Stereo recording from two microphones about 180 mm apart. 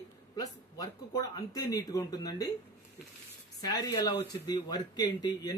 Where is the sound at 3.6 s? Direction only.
20° left (ahead or behind).